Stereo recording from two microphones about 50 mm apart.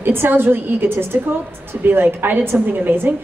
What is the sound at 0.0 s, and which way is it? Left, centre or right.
A woman's voice, right.